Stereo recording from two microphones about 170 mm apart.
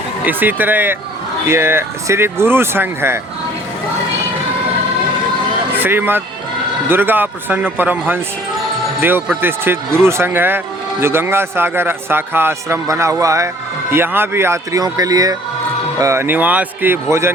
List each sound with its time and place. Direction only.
0.3 s a man's voice: 10° right (ahead or behind)
5.7 s a man's voice: 10° right (ahead or behind)